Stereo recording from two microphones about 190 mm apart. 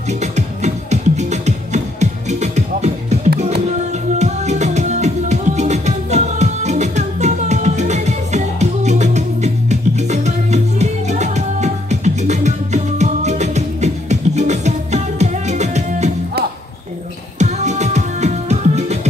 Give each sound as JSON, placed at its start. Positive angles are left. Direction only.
{"t": 0.2, "sound": "music", "side_deg": -35}
{"t": 4.2, "sound": "music", "side_deg": -35}
{"t": 17.4, "sound": "music", "side_deg": -35}